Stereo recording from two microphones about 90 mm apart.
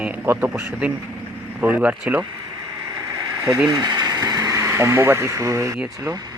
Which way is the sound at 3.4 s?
25° right (ahead or behind).